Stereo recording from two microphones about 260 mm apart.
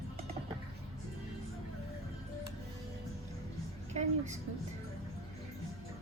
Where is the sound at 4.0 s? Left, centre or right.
Right.